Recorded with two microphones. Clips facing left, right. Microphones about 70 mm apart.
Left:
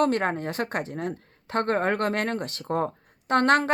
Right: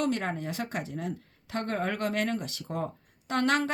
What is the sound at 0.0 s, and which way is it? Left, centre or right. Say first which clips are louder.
A woman's voice: left 6 dB; left.